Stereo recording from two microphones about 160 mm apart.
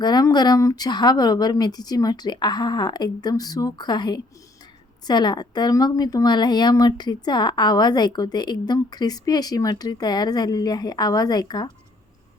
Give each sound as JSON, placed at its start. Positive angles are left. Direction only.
{"t": 0.0, "sound": "speech", "side_deg": 25}